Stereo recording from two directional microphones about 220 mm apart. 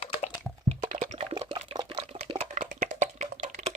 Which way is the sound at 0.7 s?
30° right (ahead or behind).